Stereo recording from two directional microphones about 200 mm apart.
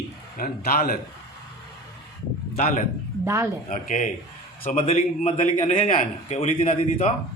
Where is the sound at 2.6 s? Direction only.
40° left (ahead or behind).